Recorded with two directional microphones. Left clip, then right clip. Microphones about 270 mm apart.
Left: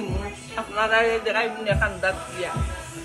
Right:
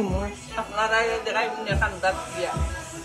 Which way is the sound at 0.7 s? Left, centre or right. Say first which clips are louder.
Left 3 dB; centre.